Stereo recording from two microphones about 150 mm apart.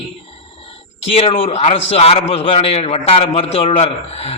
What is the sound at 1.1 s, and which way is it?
A man's voice, 40° left (ahead or behind).